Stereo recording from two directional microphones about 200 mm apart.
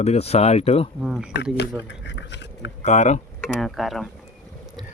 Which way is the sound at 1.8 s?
60° left (ahead or behind).